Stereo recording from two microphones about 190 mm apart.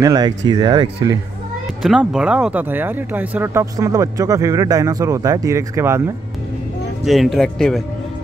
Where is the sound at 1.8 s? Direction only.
5° right (ahead or behind).